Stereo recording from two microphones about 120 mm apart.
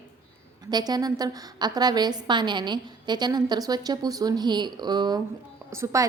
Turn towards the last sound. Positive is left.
turn(degrees=-30)  # may be behind; listen again after turning